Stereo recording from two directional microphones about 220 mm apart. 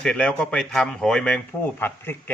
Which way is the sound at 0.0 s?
5° left (ahead or behind).